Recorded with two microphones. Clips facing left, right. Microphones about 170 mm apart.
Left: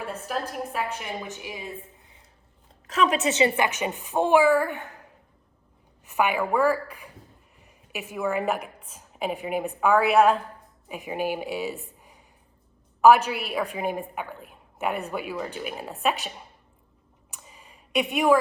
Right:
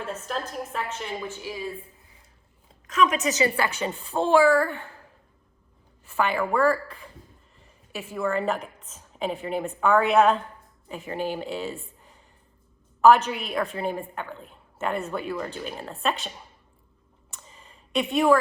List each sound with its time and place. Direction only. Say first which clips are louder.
0.0 s a woman's voice: left 1 dB; 10° left (ahead or behind)
2.8 s a woman's voice: even; 35° left (ahead or behind); by 5.0 s 15° left (ahead or behind)
6.1 s a woman's voice: left 1 dB; 15° left (ahead or behind)
17.3 s a sound: even; 10° left (ahead or behind)